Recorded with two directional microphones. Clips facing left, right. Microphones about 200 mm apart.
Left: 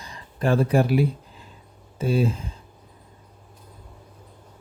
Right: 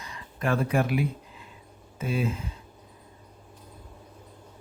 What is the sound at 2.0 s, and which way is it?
Speech, 35° left (ahead or behind).